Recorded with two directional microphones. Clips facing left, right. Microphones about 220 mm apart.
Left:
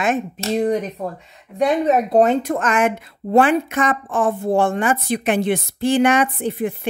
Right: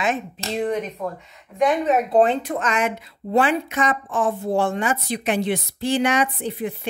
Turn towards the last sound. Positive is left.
turn(degrees=50)  # may be behind; listen again after turning